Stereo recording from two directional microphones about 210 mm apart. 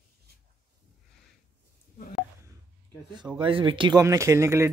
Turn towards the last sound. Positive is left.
turn(degrees=-10)  # may be behind; listen again after turning